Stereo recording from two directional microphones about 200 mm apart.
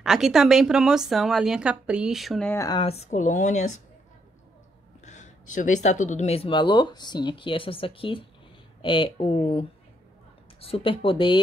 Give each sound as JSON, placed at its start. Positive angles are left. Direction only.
{"t": 0.0, "sound": "a woman's voice", "side_deg": 0}
{"t": 2.6, "sound": "speech", "side_deg": 25}
{"t": 5.0, "sound": "speech", "side_deg": 35}